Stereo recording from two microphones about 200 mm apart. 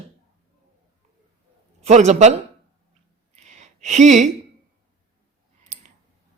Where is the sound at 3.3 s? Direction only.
35° right (ahead or behind).